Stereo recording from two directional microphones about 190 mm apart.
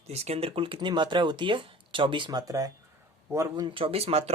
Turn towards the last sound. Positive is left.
turn(degrees=-30)  # may be behind; listen again after turning